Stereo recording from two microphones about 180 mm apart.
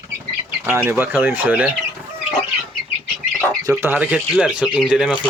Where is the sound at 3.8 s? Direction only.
10° right (ahead or behind).